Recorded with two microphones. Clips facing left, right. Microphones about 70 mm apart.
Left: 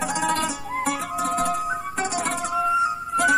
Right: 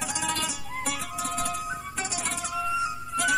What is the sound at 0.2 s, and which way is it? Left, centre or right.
Music, left.